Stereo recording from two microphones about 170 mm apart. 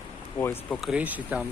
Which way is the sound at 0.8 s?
5° right (ahead or behind).